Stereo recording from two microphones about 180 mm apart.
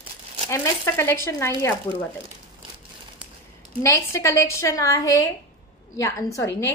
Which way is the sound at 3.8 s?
15° left (ahead or behind).